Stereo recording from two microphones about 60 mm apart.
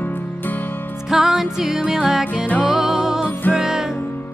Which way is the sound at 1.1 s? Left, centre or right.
Centre.